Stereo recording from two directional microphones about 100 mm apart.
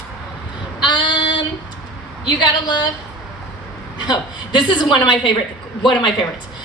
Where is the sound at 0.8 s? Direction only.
50° left (ahead or behind).